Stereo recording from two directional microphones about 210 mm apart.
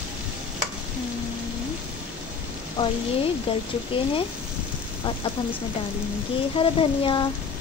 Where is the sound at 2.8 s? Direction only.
25° left (ahead or behind).